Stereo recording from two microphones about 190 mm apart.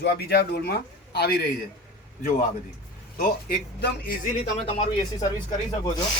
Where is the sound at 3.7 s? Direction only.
50° left (ahead or behind).